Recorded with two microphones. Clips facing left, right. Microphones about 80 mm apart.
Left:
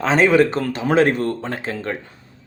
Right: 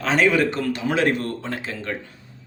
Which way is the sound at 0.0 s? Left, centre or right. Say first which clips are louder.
Left 4 dB; left.